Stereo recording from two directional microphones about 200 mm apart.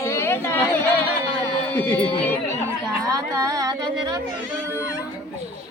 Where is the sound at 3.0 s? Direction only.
20° right (ahead or behind).